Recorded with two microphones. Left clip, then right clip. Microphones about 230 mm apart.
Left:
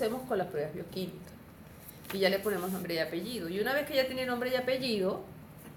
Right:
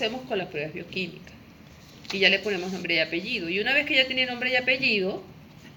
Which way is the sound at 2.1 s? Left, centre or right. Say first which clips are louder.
Right 7 dB; left.